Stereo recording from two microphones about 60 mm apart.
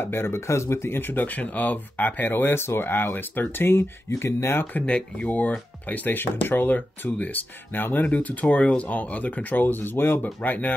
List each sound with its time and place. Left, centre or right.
0.0 s speech: left
4.8 s speech: centre